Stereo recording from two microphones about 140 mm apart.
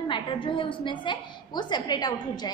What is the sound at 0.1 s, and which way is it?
A woman's voice, 35° left (ahead or behind).